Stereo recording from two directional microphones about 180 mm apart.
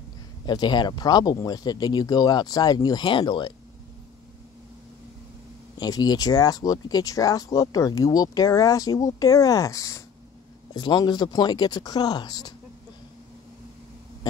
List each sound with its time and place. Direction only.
0.5 s speech: 25° left (ahead or behind)
5.8 s speech: 20° left (ahead or behind)